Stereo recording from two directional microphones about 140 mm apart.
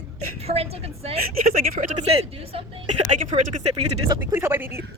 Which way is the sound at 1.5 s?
80° right.